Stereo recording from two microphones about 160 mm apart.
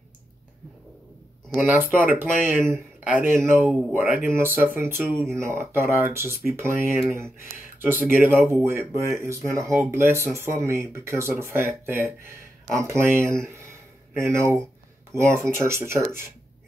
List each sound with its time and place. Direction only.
1.5 s speech: 10° right (ahead or behind)